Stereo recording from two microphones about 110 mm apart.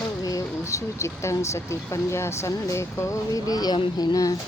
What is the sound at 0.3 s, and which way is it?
Speech, 30° left (ahead or behind).